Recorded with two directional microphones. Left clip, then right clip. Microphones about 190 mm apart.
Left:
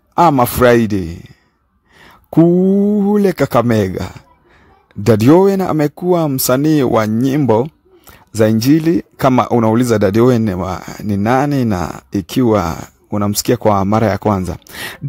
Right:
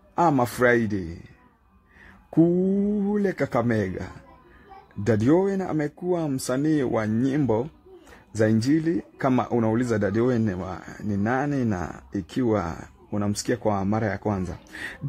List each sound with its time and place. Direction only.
0.1 s speech: 45° left (ahead or behind)
2.3 s speech: 45° left (ahead or behind)